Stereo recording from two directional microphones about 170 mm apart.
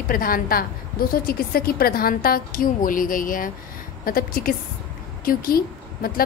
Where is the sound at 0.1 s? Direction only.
55° left (ahead or behind).